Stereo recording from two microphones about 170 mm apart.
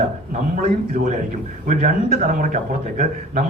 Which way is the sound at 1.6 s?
50° right (ahead or behind).